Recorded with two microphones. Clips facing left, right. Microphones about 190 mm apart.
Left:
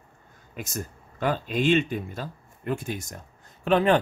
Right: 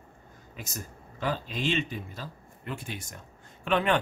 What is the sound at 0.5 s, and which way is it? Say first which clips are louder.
Speech: left 7 dB; 55° left (ahead or behind).